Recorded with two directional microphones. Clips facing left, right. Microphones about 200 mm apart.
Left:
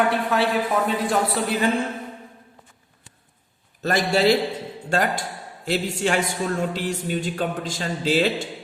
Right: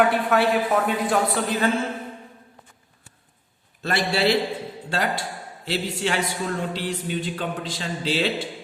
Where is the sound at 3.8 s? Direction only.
45° left (ahead or behind).